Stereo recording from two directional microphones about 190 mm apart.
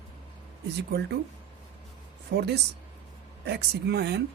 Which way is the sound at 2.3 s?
60° right (ahead or behind).